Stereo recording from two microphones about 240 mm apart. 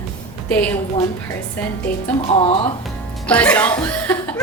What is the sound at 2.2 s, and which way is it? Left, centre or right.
Speech, left.